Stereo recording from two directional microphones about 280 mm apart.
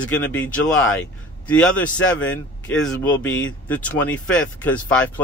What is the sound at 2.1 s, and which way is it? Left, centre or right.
Speech, centre.